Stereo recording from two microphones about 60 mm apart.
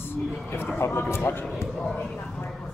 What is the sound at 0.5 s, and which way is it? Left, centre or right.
Speech, left.